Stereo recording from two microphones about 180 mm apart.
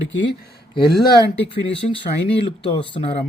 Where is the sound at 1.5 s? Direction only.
30° left (ahead or behind).